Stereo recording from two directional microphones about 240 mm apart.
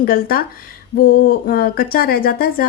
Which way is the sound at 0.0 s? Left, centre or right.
Left.